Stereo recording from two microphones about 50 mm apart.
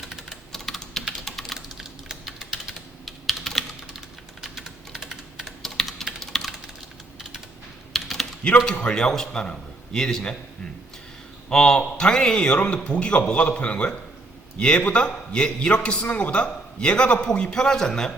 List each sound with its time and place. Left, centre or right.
0.0 s typing: centre
0.5 s typing: centre
1.5 s typing: centre
3.2 s typing: centre
5.6 s typing: centre
7.9 s typing: centre
8.6 s a man's voice: centre
11.4 s a man's voice: centre